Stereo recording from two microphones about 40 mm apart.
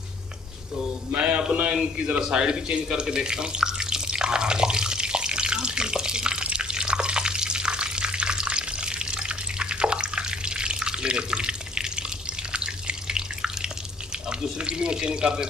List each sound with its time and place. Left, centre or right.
0.7 s speech: right
2.2 s water tap: right
12.5 s water: right
14.6 s a sound: right